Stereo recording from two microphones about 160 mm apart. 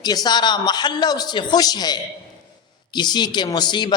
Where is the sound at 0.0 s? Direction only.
25° left (ahead or behind).